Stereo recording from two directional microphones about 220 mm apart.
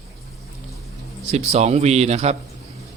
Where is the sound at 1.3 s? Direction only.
30° right (ahead or behind).